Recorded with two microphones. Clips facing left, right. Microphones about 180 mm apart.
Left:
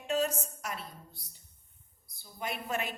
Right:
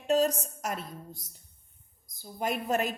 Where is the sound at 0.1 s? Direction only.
35° right (ahead or behind).